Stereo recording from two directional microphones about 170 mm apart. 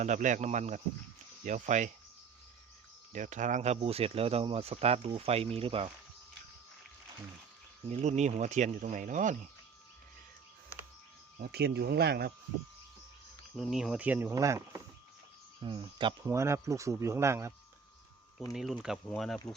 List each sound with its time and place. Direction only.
0.0 s speech: 45° right (ahead or behind)
3.1 s speech: 45° right (ahead or behind)
7.9 s speech: 40° right (ahead or behind)
11.3 s speech: 65° right (ahead or behind)
13.6 s speech: centre (ahead or behind); by 14.8 s 20° right (ahead or behind)
15.6 s speech: 30° right (ahead or behind)
16.2 s speech: 15° right (ahead or behind)
18.5 s speech: centre (ahead or behind)